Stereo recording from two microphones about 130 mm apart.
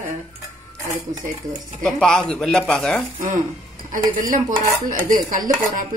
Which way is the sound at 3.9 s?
90° right.